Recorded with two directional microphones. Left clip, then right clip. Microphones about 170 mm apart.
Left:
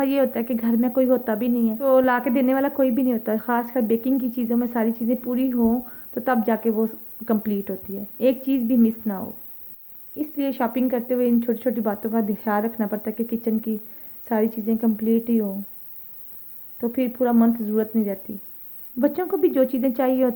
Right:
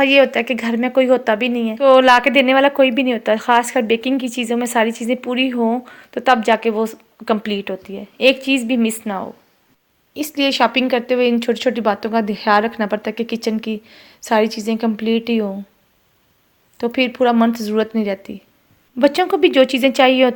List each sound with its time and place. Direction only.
0.3 s speech: 15° right (ahead or behind)
10.3 s speech: 10° right (ahead or behind)
16.7 s speech: 15° right (ahead or behind)